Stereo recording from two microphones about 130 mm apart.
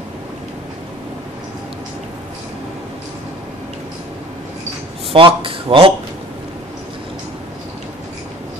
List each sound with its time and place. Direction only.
5.1 s speech: 40° right (ahead or behind)